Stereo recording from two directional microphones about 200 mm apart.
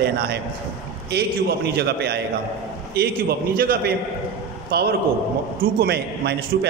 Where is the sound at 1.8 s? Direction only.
55° right (ahead or behind).